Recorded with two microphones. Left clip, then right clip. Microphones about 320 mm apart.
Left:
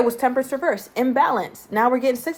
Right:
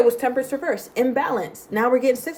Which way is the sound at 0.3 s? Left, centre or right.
Centre.